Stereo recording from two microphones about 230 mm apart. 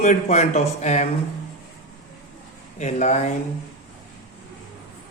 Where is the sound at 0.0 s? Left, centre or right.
Left.